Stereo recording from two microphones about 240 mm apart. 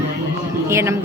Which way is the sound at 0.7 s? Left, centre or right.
Centre.